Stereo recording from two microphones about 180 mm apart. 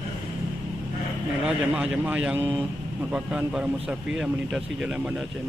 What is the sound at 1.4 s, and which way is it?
A man's voice, 5° right (ahead or behind).